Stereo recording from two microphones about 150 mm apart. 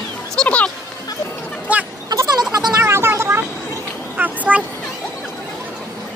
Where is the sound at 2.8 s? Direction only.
15° right (ahead or behind).